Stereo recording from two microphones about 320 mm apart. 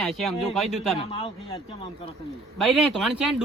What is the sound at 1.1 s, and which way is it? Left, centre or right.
Speech, centre.